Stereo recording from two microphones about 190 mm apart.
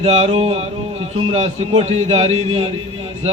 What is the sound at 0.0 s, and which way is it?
A man's voice, 35° right (ahead or behind).